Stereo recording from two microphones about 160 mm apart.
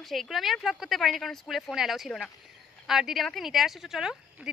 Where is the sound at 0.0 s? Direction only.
Centre (ahead or behind).